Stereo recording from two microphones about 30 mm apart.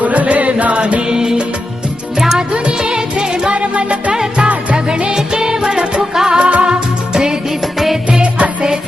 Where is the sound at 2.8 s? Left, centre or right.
Right.